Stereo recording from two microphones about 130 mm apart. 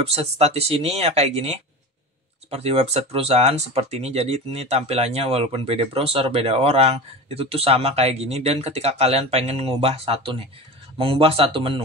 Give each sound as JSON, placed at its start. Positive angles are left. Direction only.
{"t": 0.0, "sound": "speech", "side_deg": -55}